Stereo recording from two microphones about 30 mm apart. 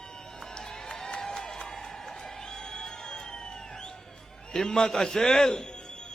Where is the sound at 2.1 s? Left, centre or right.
Centre.